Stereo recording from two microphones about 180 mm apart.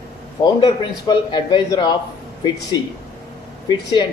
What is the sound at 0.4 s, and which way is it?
Speech, 25° left (ahead or behind).